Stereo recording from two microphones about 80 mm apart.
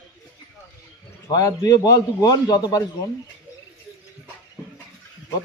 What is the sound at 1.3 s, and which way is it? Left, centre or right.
A man's voice, left.